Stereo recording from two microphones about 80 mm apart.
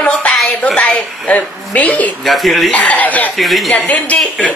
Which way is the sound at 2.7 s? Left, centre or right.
Centre.